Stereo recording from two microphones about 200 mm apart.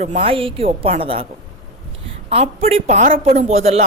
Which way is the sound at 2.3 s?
30° right (ahead or behind).